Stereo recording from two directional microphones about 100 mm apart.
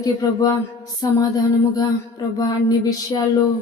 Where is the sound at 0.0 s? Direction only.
40° left (ahead or behind).